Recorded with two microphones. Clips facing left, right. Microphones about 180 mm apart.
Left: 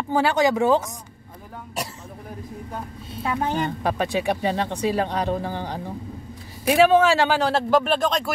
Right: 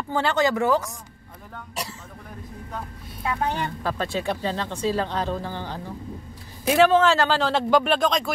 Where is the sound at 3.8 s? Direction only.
15° left (ahead or behind).